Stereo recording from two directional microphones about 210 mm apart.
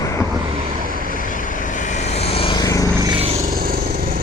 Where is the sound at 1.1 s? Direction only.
40° left (ahead or behind); by 2.9 s 15° left (ahead or behind).